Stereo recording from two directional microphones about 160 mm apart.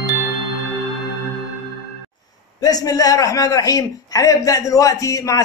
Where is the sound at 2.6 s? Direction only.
25° left (ahead or behind).